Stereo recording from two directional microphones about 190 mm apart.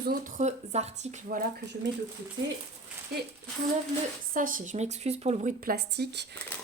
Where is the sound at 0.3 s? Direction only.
35° right (ahead or behind).